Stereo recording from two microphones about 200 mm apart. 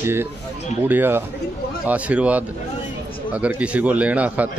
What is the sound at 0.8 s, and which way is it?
A man's voice, 10° right (ahead or behind).